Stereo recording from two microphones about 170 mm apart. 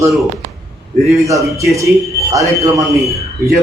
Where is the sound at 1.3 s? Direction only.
20° right (ahead or behind).